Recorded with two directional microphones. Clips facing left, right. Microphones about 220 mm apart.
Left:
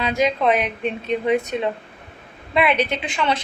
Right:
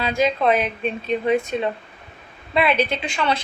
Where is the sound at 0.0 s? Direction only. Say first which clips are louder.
Even; 20° left (ahead or behind).